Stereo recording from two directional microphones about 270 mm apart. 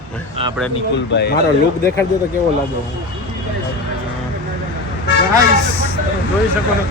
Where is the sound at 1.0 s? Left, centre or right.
Left.